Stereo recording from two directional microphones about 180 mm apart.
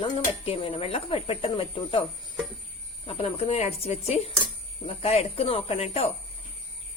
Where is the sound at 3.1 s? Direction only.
30° left (ahead or behind).